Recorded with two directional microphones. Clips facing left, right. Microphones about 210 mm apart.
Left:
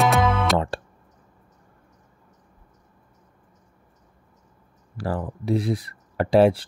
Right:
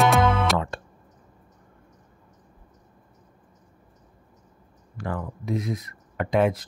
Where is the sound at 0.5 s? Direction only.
30° left (ahead or behind).